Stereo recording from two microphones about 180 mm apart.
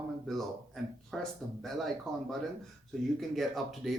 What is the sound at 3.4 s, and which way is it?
Speech, centre (ahead or behind).